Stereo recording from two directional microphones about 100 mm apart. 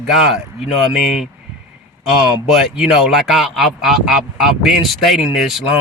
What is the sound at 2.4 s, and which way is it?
Speech, 5° right (ahead or behind).